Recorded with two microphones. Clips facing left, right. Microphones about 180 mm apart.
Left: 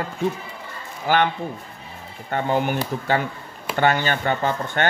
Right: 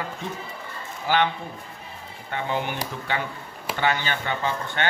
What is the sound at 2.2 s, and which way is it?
Speech, 45° left (ahead or behind).